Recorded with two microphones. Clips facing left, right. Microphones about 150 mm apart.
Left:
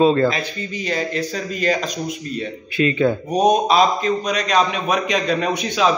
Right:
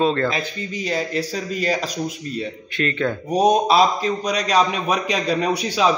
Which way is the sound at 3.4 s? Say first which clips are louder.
Left 1 dB; 30° right (ahead or behind).